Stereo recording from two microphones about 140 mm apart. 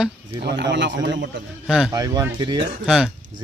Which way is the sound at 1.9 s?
25° right (ahead or behind).